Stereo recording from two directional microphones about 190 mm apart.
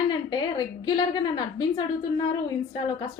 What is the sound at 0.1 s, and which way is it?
Speech, 20° left (ahead or behind).